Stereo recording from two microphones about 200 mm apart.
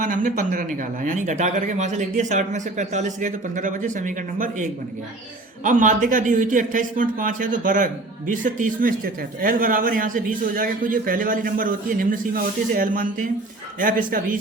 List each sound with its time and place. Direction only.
0.0 s speech: 40° right (ahead or behind)